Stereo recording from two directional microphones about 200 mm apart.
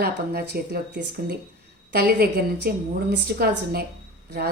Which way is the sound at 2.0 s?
55° right (ahead or behind).